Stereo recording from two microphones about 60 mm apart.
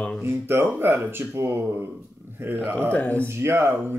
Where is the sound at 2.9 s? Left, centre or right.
Left.